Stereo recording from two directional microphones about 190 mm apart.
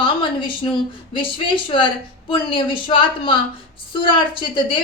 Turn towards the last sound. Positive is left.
turn(degrees=25)  # may be behind; listen again after turning